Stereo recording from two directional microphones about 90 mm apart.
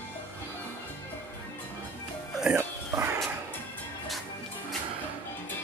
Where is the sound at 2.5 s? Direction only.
30° right (ahead or behind).